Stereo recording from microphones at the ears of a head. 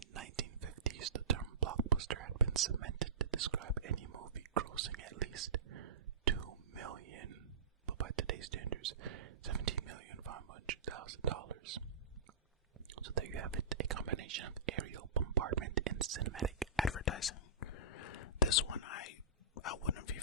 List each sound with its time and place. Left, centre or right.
0.0 s whispering: right
12.9 s whispering: right
16.9 s whispering: left
19.5 s a sound: left